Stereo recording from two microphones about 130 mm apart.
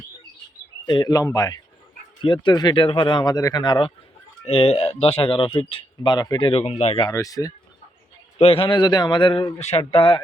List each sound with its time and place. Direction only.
0.9 s a man's voice: 30° left (ahead or behind)
2.2 s speech: 40° left (ahead or behind)
4.4 s speech: 50° left (ahead or behind); by 6.5 s 30° left (ahead or behind)
6.5 s speech: 55° left (ahead or behind)
7.1 s a man's voice: 25° left (ahead or behind)
8.4 s speech: 45° left (ahead or behind)
9.6 s speech: 55° left (ahead or behind)